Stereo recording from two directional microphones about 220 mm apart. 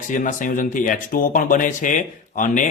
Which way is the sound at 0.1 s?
35° left (ahead or behind).